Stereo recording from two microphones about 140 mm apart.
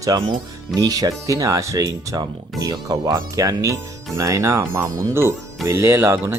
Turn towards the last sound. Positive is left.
turn(degrees=-20)  # may be behind; listen again after turning